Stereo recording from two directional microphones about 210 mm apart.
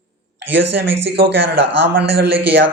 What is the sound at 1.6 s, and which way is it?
Speech, 55° right (ahead or behind).